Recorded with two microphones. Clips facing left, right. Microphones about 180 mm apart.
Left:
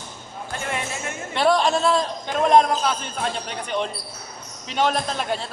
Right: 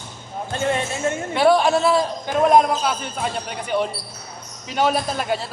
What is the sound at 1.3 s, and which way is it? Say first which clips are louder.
A man's voice: right 3 dB; 5° right (ahead or behind).